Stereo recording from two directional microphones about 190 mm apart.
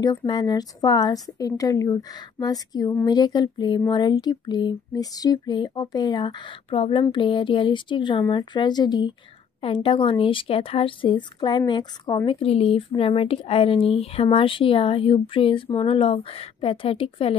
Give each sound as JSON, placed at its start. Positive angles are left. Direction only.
{"t": 0.0, "sound": "a woman's voice", "side_deg": 20}